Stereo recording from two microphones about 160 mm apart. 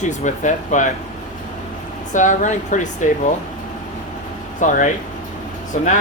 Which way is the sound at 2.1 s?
50° left (ahead or behind).